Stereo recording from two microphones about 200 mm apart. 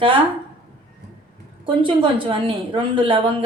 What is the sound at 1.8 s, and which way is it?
Speech, 25° right (ahead or behind).